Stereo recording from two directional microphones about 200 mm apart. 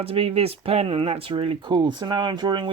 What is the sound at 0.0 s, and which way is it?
Speech, 30° right (ahead or behind).